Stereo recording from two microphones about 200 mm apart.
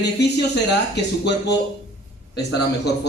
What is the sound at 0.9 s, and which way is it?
Speech, 60° left (ahead or behind).